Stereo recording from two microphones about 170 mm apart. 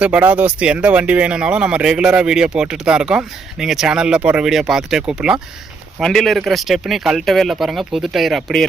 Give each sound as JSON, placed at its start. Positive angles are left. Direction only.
{"t": 0.0, "sound": "speech", "side_deg": -5}